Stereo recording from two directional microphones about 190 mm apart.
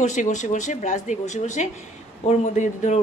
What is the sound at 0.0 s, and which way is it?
Speech, 40° left (ahead or behind).